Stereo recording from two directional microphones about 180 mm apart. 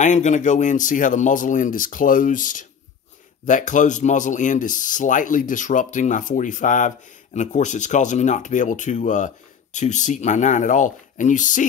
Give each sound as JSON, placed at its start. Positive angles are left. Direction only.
{"t": 0.0, "sound": "speech", "side_deg": 40}